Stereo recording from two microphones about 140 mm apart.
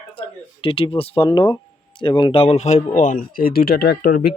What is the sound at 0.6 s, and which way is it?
Speech, 40° left (ahead or behind).